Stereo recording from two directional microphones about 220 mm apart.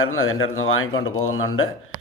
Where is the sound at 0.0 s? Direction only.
65° left (ahead or behind).